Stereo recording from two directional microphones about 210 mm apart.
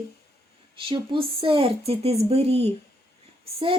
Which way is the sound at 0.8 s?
25° right (ahead or behind).